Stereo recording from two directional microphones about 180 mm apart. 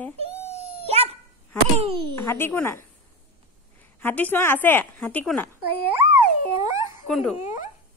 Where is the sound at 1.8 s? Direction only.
30° right (ahead or behind).